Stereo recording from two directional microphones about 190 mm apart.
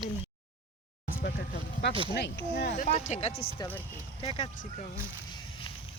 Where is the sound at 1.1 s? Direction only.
60° left (ahead or behind).